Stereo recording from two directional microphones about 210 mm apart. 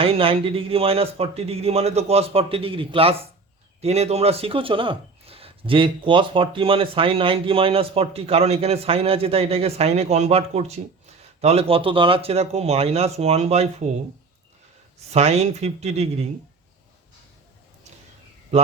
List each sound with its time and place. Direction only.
0.0 s speech: 25° right (ahead or behind)
15.1 s speech: 30° right (ahead or behind)